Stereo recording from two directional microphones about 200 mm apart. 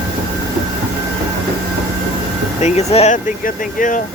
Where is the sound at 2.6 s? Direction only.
35° left (ahead or behind).